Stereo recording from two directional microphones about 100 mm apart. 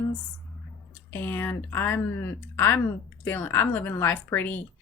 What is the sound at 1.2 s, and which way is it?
Speech, 20° left (ahead or behind).